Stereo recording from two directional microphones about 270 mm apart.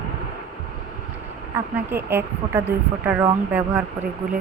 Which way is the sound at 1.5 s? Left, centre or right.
Centre.